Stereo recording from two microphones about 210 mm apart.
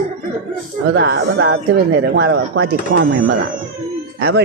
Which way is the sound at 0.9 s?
60° right (ahead or behind).